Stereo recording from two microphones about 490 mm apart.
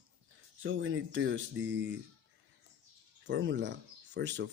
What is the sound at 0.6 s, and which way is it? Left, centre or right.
Speech, right.